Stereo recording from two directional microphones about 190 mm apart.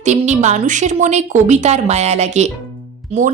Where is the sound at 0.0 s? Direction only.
40° right (ahead or behind).